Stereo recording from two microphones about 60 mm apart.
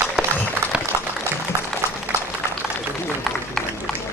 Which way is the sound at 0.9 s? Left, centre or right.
Right.